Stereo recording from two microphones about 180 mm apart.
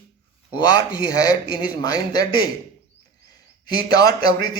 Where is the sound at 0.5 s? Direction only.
20° left (ahead or behind).